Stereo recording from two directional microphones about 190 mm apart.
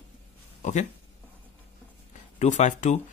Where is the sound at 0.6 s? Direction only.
40° left (ahead or behind).